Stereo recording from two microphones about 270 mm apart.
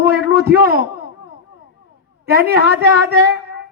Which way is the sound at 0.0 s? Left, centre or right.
Right.